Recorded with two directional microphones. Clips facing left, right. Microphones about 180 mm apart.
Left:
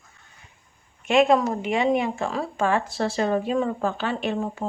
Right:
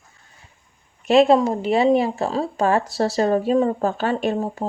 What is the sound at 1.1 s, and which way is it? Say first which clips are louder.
Speech: right 4 dB; 35° right (ahead or behind).